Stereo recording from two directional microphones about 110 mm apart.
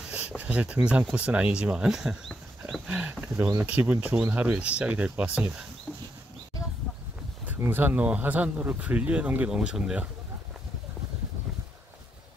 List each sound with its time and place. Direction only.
0.0 s a sound: 10° right (ahead or behind)
0.4 s speech: 15° right (ahead or behind)
2.9 s speech: 15° right (ahead or behind)
7.4 s speech: 20° right (ahead or behind)